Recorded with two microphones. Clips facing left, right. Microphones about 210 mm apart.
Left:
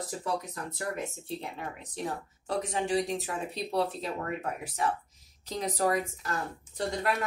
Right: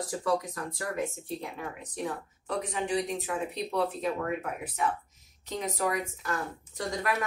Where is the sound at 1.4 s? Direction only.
30° left (ahead or behind).